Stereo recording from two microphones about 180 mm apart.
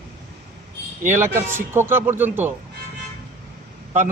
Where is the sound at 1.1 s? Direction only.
10° right (ahead or behind).